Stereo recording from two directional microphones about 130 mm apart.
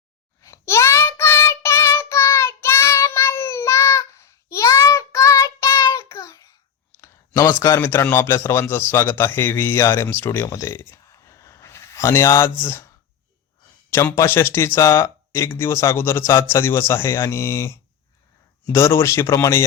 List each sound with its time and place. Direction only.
0.4 s child singing: 20° left (ahead or behind)
7.0 s a man's voice: 20° left (ahead or behind)
13.9 s speech: 20° left (ahead or behind)